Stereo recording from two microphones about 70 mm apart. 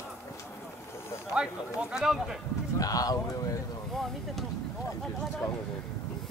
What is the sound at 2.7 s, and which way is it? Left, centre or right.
Speech, left.